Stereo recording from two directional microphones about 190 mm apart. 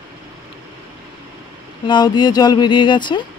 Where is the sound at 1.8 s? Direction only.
25° left (ahead or behind).